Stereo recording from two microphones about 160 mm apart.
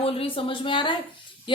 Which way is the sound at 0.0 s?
35° left (ahead or behind).